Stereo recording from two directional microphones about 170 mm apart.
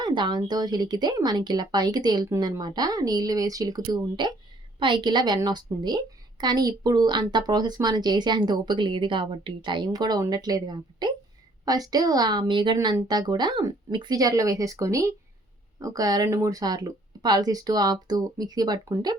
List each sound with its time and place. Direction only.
0.0 s speech: 25° right (ahead or behind)